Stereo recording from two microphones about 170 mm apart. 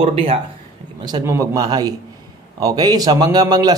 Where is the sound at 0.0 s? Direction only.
35° right (ahead or behind).